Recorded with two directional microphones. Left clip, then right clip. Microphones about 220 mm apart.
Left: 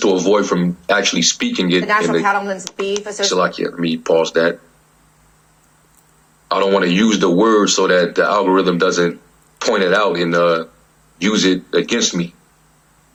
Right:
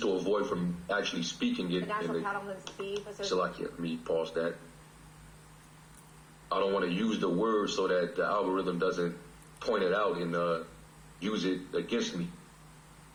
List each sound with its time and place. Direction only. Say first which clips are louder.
0.0 s speech: left 16 dB; 50° left (ahead or behind)
6.5 s speech: left 15 dB; 50° left (ahead or behind)